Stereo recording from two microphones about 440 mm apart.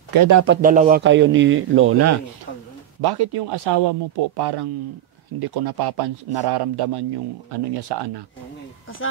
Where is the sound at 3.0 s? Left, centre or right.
Right.